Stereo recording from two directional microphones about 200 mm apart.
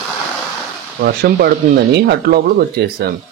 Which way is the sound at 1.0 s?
50° right (ahead or behind).